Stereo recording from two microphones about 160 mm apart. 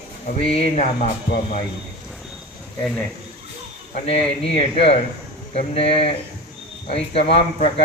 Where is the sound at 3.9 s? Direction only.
40° left (ahead or behind).